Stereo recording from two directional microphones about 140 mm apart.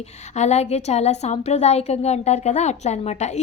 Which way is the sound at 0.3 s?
55° left (ahead or behind).